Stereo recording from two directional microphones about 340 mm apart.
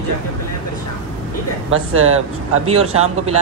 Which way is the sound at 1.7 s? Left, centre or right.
Right.